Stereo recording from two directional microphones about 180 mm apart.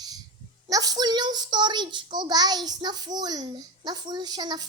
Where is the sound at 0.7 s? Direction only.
20° right (ahead or behind).